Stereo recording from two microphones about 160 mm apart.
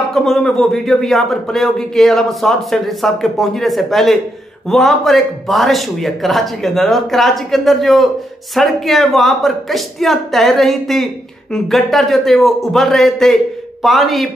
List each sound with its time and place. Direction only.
0.1 s a man's voice: 5° left (ahead or behind)